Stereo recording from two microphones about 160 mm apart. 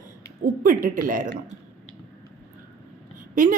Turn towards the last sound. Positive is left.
turn(degrees=-55)  # may be behind; listen again after turning